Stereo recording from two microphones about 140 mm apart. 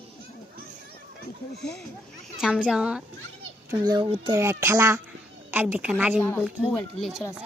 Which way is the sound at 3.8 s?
35° right (ahead or behind).